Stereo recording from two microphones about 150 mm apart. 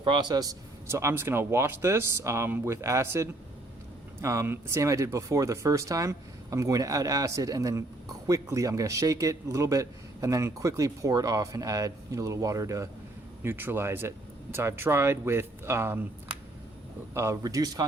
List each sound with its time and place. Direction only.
0.0 s a man's voice: 30° right (ahead or behind); by 16.0 s 15° right (ahead or behind)
17.2 s a man's voice: 20° right (ahead or behind)